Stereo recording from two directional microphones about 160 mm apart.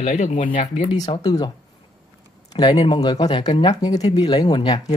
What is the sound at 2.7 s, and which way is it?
Speech, 30° left (ahead or behind).